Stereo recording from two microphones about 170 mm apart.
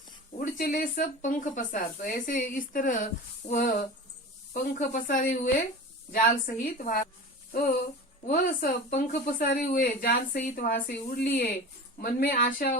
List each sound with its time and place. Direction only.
0.3 s speech: 50° left (ahead or behind)
8.3 s a woman's voice: 60° left (ahead or behind)